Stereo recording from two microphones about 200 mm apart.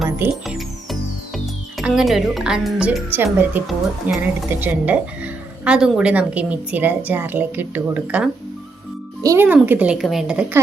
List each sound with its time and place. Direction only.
0.0 s music: 10° right (ahead or behind)
0.4 s music: centre (ahead or behind)
1.8 s a woman's voice: centre (ahead or behind)